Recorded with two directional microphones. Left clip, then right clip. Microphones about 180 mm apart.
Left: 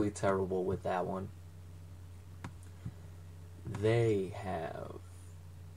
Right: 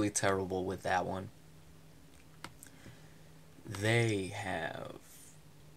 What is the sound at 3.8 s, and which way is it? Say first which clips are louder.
Speech: left 1 dB; 15° right (ahead or behind).